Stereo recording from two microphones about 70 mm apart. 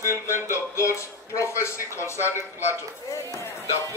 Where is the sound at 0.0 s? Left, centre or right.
Left.